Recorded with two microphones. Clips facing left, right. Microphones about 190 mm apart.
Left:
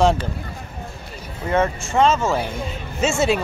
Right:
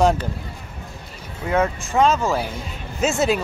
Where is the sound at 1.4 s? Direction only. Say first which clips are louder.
Left 1 dB; centre (ahead or behind).